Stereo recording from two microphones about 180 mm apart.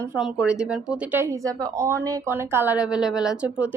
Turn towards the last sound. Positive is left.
turn(degrees=-10)  # may be behind; listen again after turning